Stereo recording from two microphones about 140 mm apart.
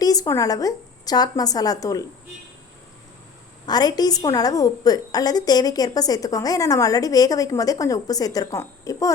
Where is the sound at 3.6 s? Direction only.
30° left (ahead or behind).